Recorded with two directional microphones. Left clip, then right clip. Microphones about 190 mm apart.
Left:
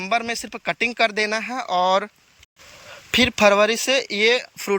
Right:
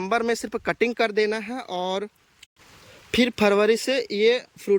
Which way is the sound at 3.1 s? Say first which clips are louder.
Left 5 dB; 10° right (ahead or behind).